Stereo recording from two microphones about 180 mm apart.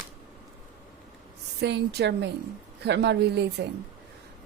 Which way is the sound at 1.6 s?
70° right (ahead or behind).